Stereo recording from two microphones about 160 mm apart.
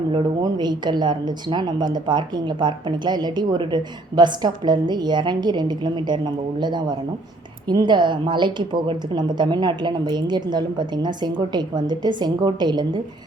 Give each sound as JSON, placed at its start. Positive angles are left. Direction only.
{"t": 0.1, "sound": "a woman's voice", "side_deg": -30}